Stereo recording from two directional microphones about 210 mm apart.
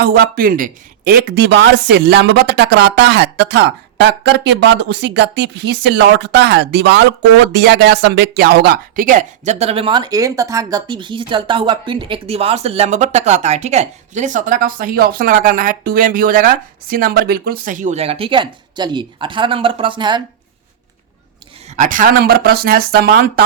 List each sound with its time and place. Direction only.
0.0 s a man's voice: 45° right (ahead or behind); by 20.2 s 20° right (ahead or behind)
21.8 s speech: 40° right (ahead or behind)